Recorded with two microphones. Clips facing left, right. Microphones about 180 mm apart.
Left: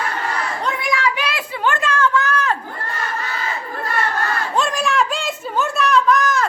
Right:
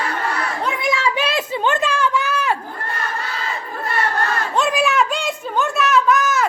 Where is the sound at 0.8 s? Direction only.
25° right (ahead or behind).